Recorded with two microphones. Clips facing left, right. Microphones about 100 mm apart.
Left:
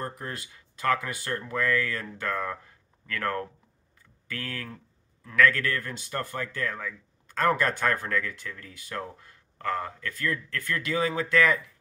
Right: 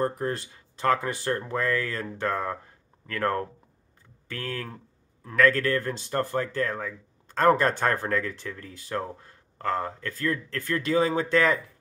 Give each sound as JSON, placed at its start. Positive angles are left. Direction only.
{"t": 0.0, "sound": "a man's voice", "side_deg": -30}